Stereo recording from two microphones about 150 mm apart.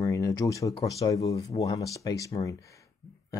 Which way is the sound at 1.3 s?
40° left (ahead or behind).